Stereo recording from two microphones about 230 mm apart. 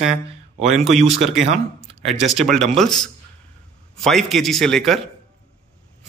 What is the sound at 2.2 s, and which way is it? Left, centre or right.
Speech, centre.